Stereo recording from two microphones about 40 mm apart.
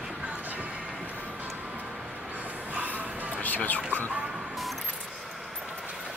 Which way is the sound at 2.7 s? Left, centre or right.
Right.